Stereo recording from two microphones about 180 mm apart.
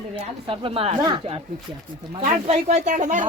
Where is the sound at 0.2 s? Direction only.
30° right (ahead or behind).